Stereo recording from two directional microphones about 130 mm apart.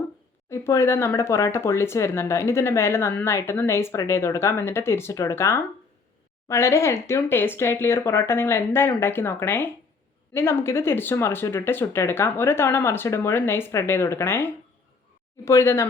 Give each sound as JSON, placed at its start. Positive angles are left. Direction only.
{"t": 0.5, "sound": "speech", "side_deg": 20}